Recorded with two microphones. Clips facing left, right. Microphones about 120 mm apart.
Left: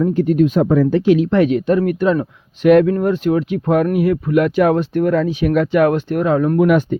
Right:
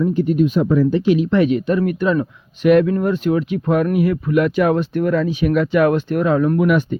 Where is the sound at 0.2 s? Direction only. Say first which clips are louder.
Left 3 dB; 90° left; by 2.1 s 65° left (ahead or behind).